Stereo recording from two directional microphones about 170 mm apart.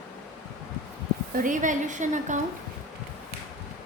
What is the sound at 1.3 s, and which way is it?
A woman's voice, 50° right (ahead or behind).